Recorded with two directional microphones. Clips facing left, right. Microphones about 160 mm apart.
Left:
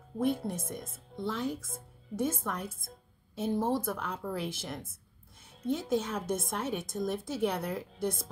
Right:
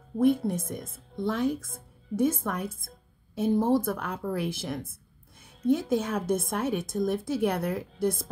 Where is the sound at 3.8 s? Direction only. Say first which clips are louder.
Right 4 dB; 55° right (ahead or behind).